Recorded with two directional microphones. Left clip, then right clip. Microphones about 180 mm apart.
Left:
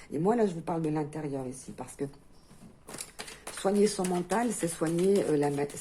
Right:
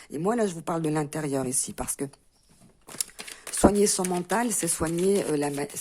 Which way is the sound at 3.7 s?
40° right (ahead or behind).